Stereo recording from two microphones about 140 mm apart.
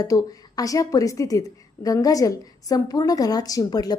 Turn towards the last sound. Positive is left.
turn(degrees=30)  # may be behind; listen again after turning